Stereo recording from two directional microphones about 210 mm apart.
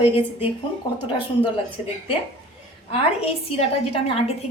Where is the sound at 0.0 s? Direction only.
30° left (ahead or behind).